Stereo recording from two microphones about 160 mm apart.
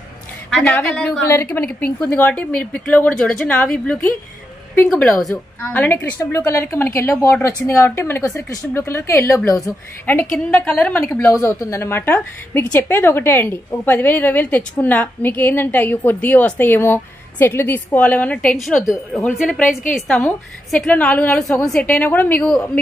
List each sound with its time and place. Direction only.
0.5 s a woman's voice: 5° left (ahead or behind)
1.2 s a woman's voice: 15° left (ahead or behind)
5.6 s a woman's voice: 15° left (ahead or behind)
10.3 s a woman's voice: 5° left (ahead or behind)